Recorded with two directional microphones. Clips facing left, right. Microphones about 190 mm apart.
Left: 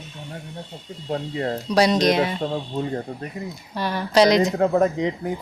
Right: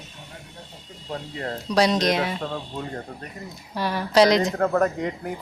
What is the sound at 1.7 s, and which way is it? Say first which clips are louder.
Speech: left 2 dB; 5° left (ahead or behind).